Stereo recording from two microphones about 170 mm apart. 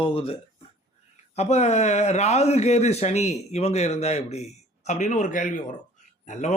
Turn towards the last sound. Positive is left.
turn(degrees=45)  # may be behind; listen again after turning